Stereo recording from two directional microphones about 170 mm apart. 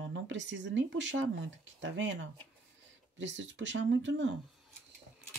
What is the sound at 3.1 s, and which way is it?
Speech, 90° right.